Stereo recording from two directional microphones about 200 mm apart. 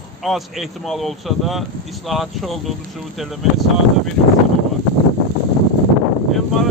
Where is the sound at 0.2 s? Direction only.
Centre (ahead or behind).